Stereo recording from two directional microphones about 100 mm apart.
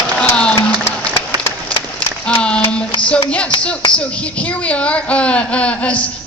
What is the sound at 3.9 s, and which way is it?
Speech, 10° left (ahead or behind).